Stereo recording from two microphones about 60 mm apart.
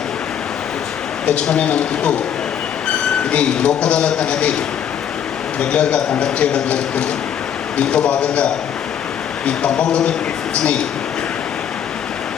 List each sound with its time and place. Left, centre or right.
1.5 s speech: centre
3.3 s a man's voice: centre
5.5 s a man's voice: left
9.5 s speech: centre